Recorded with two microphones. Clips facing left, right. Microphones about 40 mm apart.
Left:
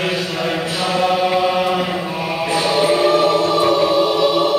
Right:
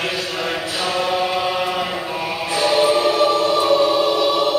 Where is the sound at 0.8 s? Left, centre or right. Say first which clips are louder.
Left 4 dB; centre.